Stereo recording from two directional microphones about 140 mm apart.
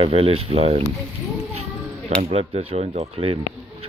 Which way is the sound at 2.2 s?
50° right (ahead or behind).